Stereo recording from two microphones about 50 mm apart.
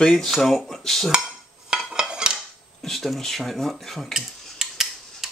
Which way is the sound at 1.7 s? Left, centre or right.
Centre.